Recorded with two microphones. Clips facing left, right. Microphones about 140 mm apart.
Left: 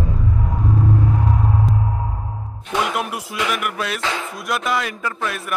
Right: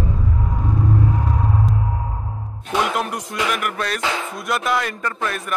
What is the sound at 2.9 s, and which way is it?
Speech, 5° left (ahead or behind).